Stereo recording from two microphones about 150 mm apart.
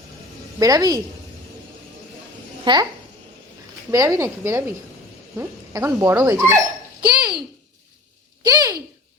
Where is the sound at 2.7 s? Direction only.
35° right (ahead or behind).